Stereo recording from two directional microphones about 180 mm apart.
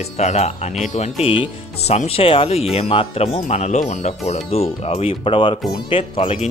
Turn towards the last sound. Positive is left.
turn(degrees=30)  # may be behind; listen again after turning